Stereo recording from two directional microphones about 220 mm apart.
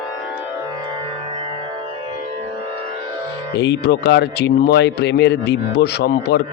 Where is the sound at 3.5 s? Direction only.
50° left (ahead or behind).